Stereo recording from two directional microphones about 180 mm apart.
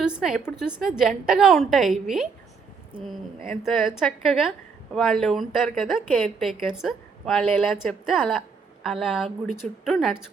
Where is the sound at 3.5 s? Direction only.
Centre (ahead or behind).